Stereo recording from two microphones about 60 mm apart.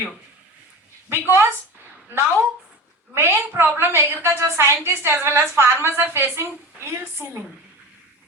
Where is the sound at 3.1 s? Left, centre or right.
Right.